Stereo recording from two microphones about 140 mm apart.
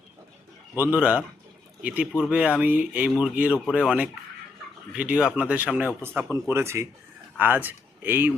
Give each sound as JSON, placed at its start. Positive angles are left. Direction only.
{"t": 0.8, "sound": "speech", "side_deg": -10}